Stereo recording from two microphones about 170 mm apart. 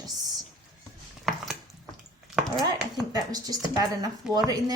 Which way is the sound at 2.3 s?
Centre (ahead or behind).